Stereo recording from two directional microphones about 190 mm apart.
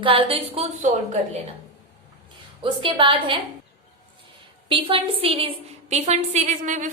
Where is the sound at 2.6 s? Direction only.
25° right (ahead or behind).